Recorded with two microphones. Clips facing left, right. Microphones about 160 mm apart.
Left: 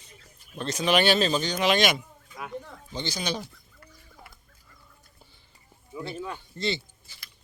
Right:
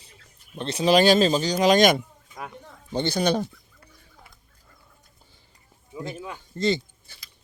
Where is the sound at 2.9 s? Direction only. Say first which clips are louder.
Right 9 dB; 55° right (ahead or behind).